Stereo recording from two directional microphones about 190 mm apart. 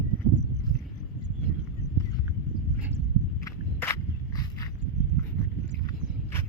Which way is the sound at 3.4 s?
15° left (ahead or behind).